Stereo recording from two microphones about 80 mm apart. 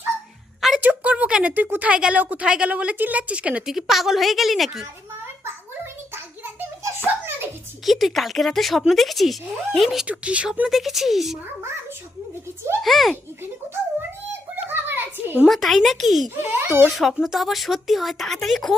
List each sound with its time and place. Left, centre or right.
0.8 s a sound: centre
1.8 s a woman's voice: centre
3.7 s speech: centre
7.1 s a sound: right
7.9 s speech: centre
10.1 s a woman's voice: centre
10.7 s speech: centre
12.8 s speech: centre
14.5 s a sound: right
15.4 s speech: centre
16.3 s a child's voice: right
16.9 s speech: centre